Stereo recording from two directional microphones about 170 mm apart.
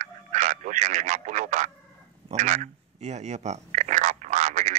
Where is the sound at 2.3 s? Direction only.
45° right (ahead or behind).